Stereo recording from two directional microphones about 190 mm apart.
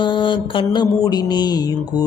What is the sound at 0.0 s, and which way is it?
Speech, 25° left (ahead or behind).